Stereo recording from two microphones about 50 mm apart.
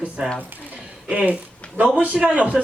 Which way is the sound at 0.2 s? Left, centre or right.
Right.